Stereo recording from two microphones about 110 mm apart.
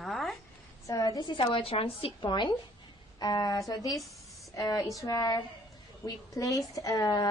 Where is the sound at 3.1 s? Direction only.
40° left (ahead or behind).